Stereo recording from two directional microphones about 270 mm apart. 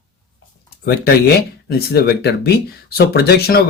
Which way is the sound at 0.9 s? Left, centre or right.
Left.